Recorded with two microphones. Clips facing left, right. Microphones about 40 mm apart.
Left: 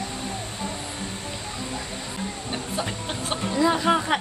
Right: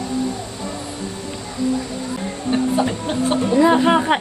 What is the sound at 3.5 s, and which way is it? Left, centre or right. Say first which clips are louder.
Music: right 6 dB; right.